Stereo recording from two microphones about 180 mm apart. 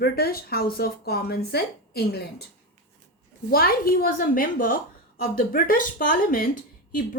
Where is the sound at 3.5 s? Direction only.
55° left (ahead or behind).